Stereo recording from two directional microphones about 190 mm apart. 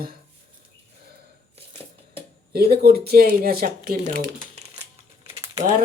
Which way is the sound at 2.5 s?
55° right (ahead or behind).